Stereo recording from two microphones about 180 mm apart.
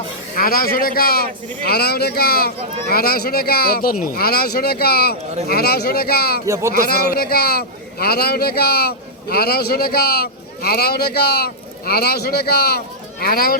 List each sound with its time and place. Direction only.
0.3 s a man's voice: 55° left (ahead or behind)
6.4 s speech: 15° right (ahead or behind)
6.7 s a man's voice: 60° left (ahead or behind)